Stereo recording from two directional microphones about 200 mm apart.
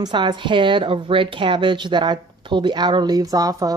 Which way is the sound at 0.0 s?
20° right (ahead or behind).